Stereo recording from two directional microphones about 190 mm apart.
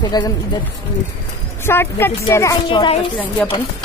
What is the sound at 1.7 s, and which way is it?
Speech, 10° left (ahead or behind).